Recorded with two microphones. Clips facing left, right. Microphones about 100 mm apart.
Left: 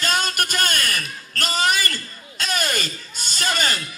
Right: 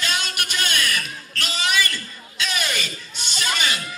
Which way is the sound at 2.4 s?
45° left (ahead or behind).